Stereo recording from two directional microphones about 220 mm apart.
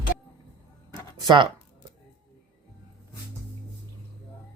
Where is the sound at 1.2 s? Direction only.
20° right (ahead or behind).